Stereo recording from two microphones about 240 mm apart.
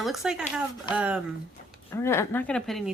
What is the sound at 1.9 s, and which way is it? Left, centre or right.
Speech, centre.